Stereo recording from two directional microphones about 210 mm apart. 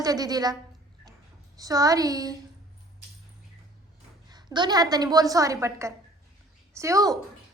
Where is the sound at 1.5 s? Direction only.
15° right (ahead or behind).